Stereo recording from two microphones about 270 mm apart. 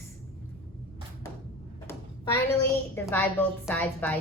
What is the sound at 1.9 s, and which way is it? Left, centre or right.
A woman's voice, centre.